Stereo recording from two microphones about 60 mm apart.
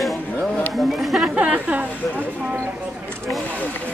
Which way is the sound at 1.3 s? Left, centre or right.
Right.